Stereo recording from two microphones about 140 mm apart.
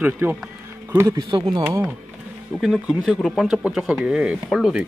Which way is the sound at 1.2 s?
30° right (ahead or behind).